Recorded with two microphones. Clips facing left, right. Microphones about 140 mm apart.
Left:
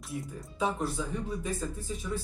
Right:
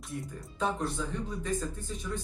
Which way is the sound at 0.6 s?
5° left (ahead or behind).